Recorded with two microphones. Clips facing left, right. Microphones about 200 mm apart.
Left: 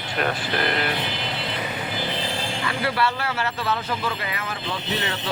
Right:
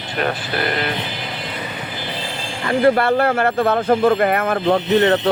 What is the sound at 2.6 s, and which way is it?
Speech, 45° right (ahead or behind).